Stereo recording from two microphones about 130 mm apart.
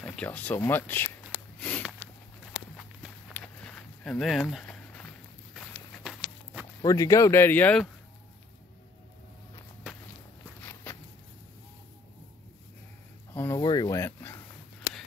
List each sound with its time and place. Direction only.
0.0 s speech: 10° left (ahead or behind)
1.6 s sniff: 10° left (ahead or behind)
3.3 s a sound: 10° left (ahead or behind)
6.8 s speech: 25° left (ahead or behind)
10.6 s walk: 15° left (ahead or behind)
13.3 s a sound: 20° left (ahead or behind)